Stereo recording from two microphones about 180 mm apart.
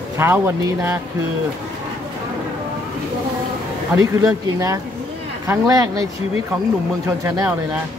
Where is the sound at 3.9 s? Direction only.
20° right (ahead or behind).